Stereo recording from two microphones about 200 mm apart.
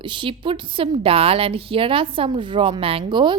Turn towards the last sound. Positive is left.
turn(degrees=-25)  # may be behind; listen again after turning